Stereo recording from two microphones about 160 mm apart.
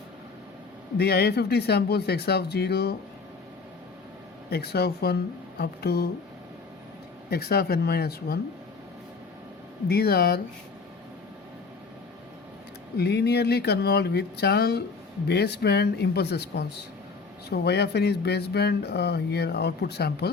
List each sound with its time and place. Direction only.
0.9 s speech: 85° left
4.4 s speech: 80° left
7.3 s speech: 75° left (ahead or behind)
9.9 s speech: 75° left (ahead or behind)
13.0 s speech: 90° left